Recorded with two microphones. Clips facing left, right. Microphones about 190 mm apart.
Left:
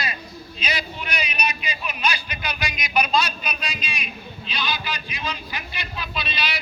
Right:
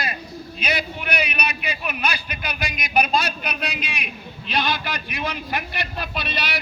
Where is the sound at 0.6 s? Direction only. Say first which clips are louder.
Right 3 dB; 60° right (ahead or behind).